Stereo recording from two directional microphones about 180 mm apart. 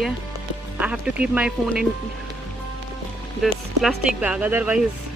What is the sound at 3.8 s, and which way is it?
Speech, 5° right (ahead or behind).